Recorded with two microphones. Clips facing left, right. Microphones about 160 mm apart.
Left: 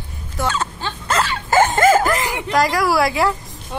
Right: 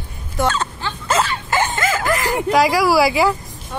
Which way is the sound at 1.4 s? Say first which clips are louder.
Left 6 dB; 45° left (ahead or behind).